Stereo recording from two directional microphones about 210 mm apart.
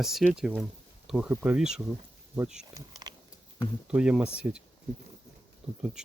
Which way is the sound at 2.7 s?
20° right (ahead or behind).